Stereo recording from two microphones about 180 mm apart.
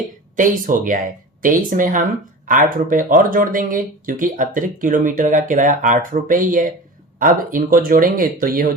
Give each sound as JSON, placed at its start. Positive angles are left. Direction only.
{"t": 0.3, "sound": "speech", "side_deg": -45}